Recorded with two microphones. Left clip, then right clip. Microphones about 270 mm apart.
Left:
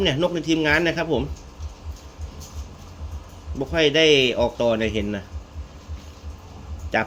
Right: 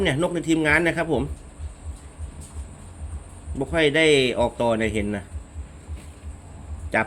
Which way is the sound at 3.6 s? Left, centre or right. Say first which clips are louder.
Left 1 dB; centre.